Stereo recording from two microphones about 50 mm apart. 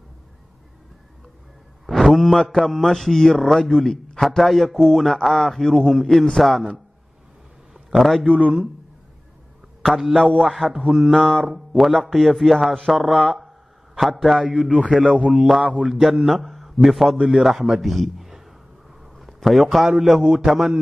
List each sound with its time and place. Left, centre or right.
1.9 s a man's voice: centre
7.9 s a man's voice: centre
9.8 s a man's voice: centre
10.1 s a man's voice: centre
10.9 s a sound: centre
11.1 s mantra: centre
11.4 s a man's voice: centre
14.9 s a sound: centre
15.2 s a man's voice: centre
15.6 s mantra: right
15.9 s a man's voice: centre